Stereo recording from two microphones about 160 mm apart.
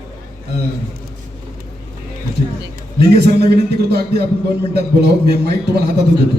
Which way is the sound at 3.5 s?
85° right.